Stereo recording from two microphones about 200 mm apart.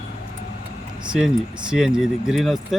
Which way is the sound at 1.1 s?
5° right (ahead or behind).